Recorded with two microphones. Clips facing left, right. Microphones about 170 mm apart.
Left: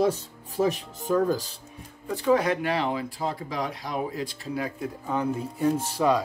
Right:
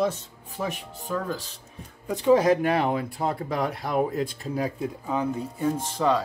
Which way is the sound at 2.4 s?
45° right (ahead or behind).